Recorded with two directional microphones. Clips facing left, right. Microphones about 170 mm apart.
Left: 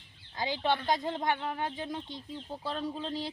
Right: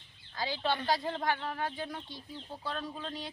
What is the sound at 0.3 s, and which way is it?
Speech, 20° left (ahead or behind).